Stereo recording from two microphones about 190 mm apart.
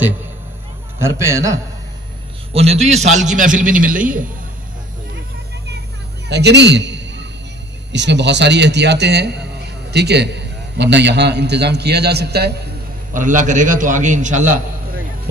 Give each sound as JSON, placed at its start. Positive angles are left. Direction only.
{"t": 0.9, "sound": "a man's voice", "side_deg": -15}
{"t": 2.5, "sound": "a man's voice", "side_deg": -35}
{"t": 6.2, "sound": "a man's voice", "side_deg": -60}
{"t": 13.1, "sound": "a man's voice", "side_deg": -40}